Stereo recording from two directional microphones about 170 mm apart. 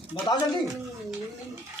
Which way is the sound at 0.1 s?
25° left (ahead or behind).